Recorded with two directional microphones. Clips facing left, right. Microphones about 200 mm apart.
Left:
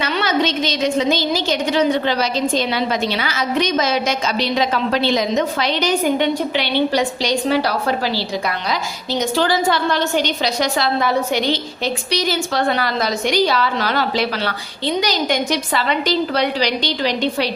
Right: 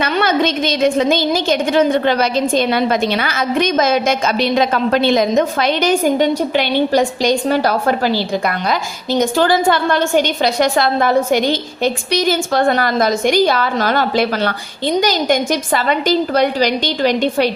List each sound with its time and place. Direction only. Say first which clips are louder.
0.0 s a woman's voice: right 3 dB; 55° right (ahead or behind)